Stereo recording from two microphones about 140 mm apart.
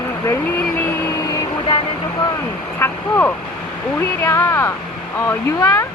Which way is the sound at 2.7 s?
15° left (ahead or behind).